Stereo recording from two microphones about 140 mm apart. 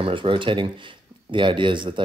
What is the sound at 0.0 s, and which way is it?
Speech, 40° right (ahead or behind).